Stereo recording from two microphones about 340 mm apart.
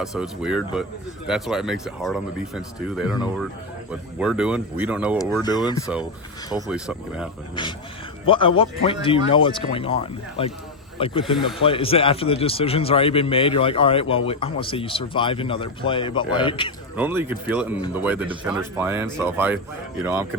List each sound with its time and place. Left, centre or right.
0.0 s speech: centre
5.4 s a man's voice: centre
6.7 s speech: centre
8.3 s a man's voice: centre
17.0 s speech: centre